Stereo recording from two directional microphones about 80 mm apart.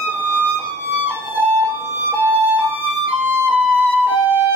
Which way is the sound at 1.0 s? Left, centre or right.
Right.